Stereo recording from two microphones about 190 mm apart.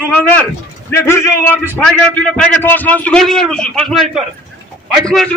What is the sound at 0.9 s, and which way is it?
A man's voice, 15° left (ahead or behind).